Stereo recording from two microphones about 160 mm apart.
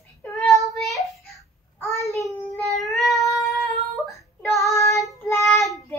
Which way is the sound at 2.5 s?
Centre (ahead or behind).